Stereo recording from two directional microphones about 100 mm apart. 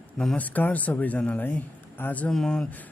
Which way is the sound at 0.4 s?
15° left (ahead or behind).